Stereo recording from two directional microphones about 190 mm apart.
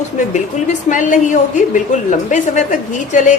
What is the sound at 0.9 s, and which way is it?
A woman's voice, 40° left (ahead or behind).